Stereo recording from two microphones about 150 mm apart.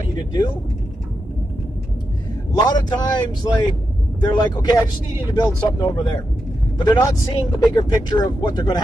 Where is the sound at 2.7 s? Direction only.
30° left (ahead or behind).